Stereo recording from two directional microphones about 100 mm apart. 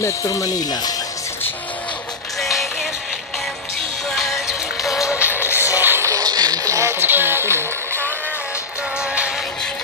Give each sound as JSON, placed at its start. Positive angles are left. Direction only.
{"t": 0.0, "sound": "speech", "side_deg": 35}
{"t": 2.4, "sound": "music", "side_deg": 0}
{"t": 4.1, "sound": "music", "side_deg": 0}
{"t": 4.9, "sound": "music", "side_deg": 30}
{"t": 5.8, "sound": "music", "side_deg": -25}